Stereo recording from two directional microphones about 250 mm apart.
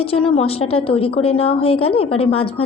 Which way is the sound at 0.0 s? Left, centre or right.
Left.